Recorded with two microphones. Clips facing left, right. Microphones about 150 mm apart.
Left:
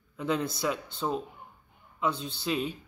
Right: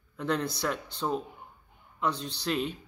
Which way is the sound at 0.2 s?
5° left (ahead or behind).